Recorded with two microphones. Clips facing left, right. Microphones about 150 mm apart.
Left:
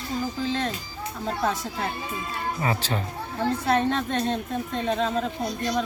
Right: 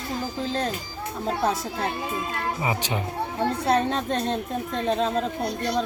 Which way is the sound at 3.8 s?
35° right (ahead or behind).